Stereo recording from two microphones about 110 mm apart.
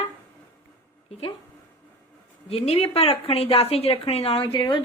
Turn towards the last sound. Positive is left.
turn(degrees=45)  # may be behind; listen again after turning